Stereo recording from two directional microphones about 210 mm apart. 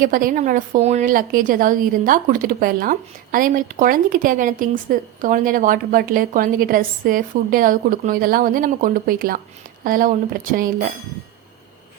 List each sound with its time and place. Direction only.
0.0 s a woman's voice: 40° right (ahead or behind)